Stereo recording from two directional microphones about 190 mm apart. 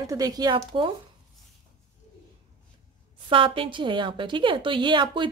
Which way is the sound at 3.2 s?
25° right (ahead or behind).